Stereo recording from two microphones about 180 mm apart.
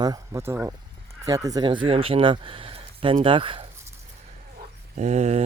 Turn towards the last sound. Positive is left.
turn(degrees=-35)  # may be behind; listen again after turning